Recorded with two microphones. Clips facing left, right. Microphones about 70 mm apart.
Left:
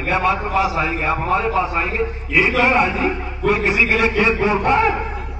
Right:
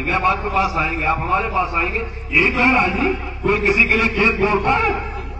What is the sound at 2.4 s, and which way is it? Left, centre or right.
A man's voice, centre.